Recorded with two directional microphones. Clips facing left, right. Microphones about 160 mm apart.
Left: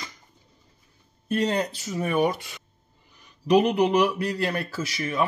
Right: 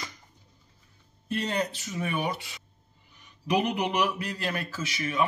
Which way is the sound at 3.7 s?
35° left (ahead or behind).